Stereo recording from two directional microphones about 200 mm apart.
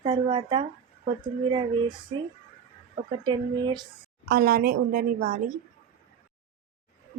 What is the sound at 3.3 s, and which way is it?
Speech, 20° right (ahead or behind).